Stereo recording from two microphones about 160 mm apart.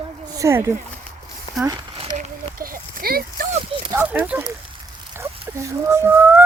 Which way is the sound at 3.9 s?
10° right (ahead or behind).